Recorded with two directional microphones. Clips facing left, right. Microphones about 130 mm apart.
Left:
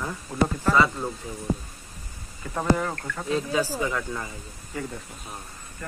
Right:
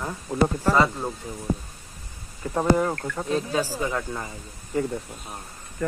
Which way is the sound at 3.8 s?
20° right (ahead or behind).